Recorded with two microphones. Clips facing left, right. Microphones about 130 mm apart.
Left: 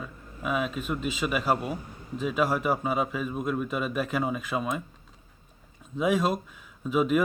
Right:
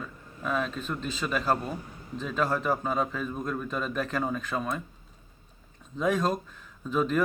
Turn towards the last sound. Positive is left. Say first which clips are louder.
# left 3 dB
turn(degrees=10)  # may be behind; listen again after turning